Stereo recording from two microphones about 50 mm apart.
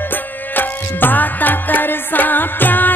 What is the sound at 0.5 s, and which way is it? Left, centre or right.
Music, left.